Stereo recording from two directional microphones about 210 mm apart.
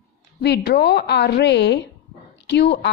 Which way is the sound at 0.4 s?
50° left (ahead or behind).